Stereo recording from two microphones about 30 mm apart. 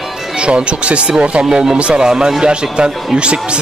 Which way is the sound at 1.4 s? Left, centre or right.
Right.